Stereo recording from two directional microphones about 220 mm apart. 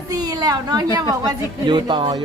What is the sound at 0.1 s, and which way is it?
A woman's voice, 15° right (ahead or behind).